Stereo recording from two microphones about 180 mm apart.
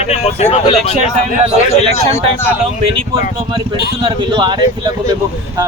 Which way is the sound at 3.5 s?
30° right (ahead or behind).